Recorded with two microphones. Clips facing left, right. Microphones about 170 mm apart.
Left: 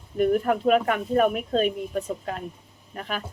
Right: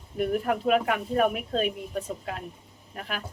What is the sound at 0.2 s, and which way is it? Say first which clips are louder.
Speech: left 5 dB; centre (ahead or behind).